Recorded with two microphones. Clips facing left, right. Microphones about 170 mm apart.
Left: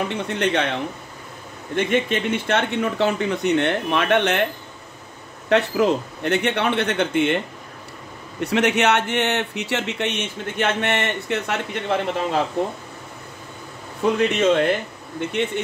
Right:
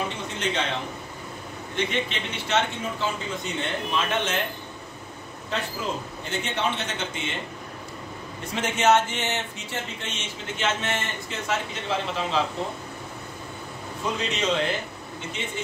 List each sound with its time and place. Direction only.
0.3 s speech: 65° left (ahead or behind)
1.8 s speech: 50° left (ahead or behind)
5.5 s speech: 70° left (ahead or behind)
8.4 s speech: 70° left (ahead or behind)
14.1 s speech: 60° left (ahead or behind)